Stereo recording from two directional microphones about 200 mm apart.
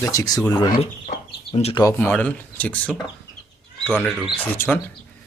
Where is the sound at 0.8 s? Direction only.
30° left (ahead or behind).